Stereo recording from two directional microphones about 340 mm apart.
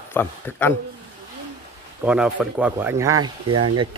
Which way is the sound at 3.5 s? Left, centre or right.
Right.